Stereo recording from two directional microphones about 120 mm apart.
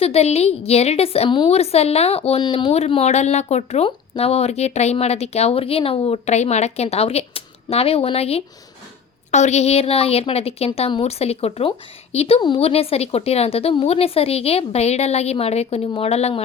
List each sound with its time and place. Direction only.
0.0 s speech: 60° left (ahead or behind)
3.8 s speech: 55° left (ahead or behind)
9.3 s speech: 70° left (ahead or behind)